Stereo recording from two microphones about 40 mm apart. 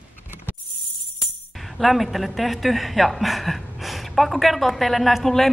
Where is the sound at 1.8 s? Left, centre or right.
Centre.